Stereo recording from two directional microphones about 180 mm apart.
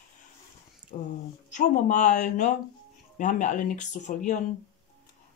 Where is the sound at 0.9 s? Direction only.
40° left (ahead or behind).